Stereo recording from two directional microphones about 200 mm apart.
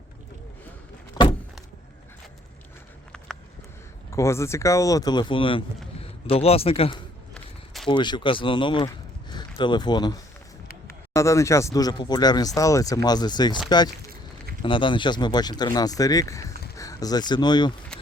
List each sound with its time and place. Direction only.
4.1 s speech: 15° left (ahead or behind)
7.3 s walk: centre (ahead or behind)
7.9 s speech: 25° left (ahead or behind)
17.9 s a sound: 5° left (ahead or behind)